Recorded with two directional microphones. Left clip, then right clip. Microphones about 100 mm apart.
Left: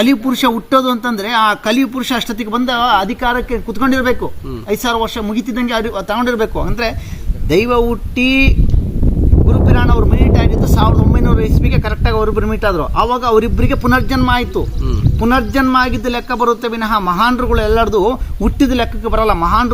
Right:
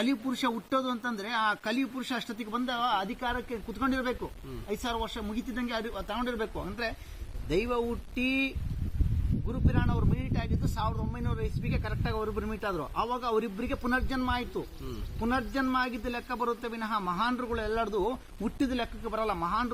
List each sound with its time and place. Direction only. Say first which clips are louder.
0.0 s a man's voice: left 17 dB; 15° left (ahead or behind)